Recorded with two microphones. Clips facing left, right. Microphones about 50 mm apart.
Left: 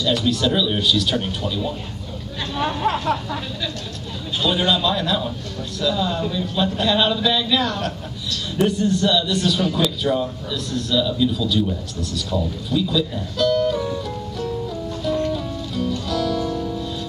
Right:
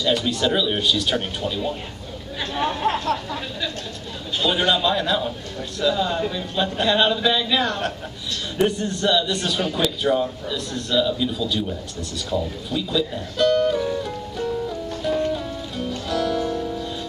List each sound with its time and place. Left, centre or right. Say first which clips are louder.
0.1 s a man's voice: left 1 dB; centre
4.4 s a man's voice: even; centre
13.8 s music: even; centre